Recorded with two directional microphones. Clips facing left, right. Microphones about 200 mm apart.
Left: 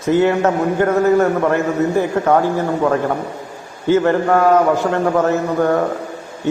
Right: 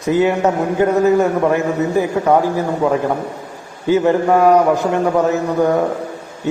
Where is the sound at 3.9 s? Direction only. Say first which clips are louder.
Right 1 dB; 15° right (ahead or behind).